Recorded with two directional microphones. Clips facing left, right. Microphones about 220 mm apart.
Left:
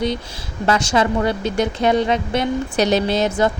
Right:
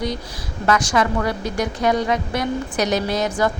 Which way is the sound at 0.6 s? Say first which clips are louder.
Left 1 dB; 25° left (ahead or behind).